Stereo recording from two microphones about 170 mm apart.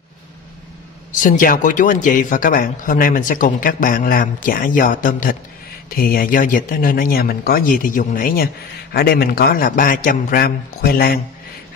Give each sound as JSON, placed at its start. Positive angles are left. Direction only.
{"t": 1.2, "sound": "a man's voice", "side_deg": 50}
{"t": 8.9, "sound": "a man's voice", "side_deg": 65}